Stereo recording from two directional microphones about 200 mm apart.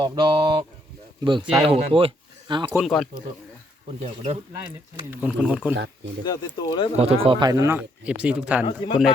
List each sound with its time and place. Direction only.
0.0 s speech: 20° right (ahead or behind)
2.7 s speech: centre (ahead or behind)
4.0 s speech: 30° right (ahead or behind)
5.1 s speech: 5° right (ahead or behind)
6.2 s speech: 20° left (ahead or behind)
6.9 s speech: 30° right (ahead or behind); by 8.6 s 5° right (ahead or behind)
8.6 s speech: 25° left (ahead or behind)